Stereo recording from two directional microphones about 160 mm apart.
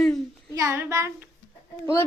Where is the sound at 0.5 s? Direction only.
15° right (ahead or behind).